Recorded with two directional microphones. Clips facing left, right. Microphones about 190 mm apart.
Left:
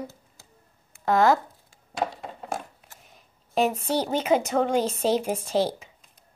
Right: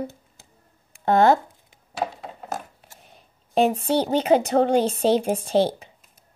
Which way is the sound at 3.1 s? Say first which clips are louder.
Right 4 dB; 30° right (ahead or behind).